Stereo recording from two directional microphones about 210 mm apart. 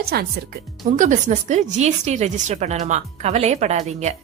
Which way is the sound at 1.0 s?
35° right (ahead or behind).